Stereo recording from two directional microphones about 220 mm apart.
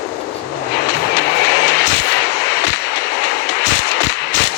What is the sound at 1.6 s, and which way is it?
Vehicle, 50° left (ahead or behind).